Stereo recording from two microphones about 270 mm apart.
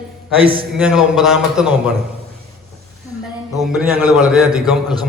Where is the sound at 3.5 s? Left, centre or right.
Centre.